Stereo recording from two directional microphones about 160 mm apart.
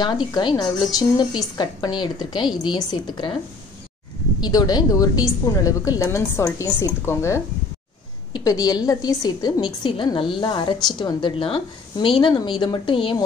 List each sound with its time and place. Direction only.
0.0 s a woman's voice: 25° left (ahead or behind)
4.4 s a woman's voice: 25° left (ahead or behind)